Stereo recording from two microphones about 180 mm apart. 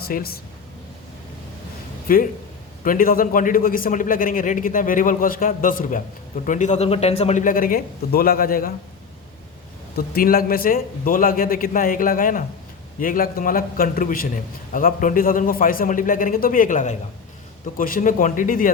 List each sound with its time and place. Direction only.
0.0 s speech: 55° left (ahead or behind)
2.1 s a man's voice: 50° left (ahead or behind)
10.1 s a man's voice: 55° left (ahead or behind)